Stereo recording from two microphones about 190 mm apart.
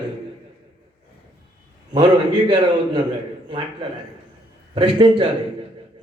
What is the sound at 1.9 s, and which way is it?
A man's voice, 25° right (ahead or behind).